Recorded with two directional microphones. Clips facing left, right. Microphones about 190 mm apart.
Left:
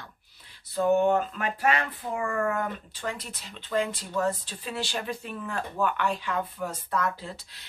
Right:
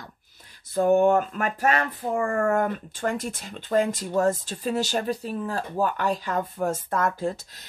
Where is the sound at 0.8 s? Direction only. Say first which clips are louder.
Right 4 dB; 45° right (ahead or behind).